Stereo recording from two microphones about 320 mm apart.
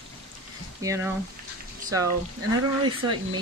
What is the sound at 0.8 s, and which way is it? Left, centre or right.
Speech, centre.